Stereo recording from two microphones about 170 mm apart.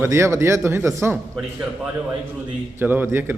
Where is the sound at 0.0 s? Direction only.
15° right (ahead or behind).